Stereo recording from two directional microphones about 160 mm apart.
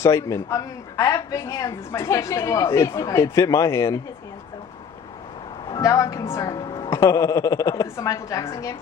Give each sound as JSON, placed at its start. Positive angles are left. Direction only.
{"t": 0.0, "sound": "speech", "side_deg": 20}
{"t": 5.7, "sound": "a woman's voice", "side_deg": 20}
{"t": 6.9, "sound": "speech", "side_deg": 20}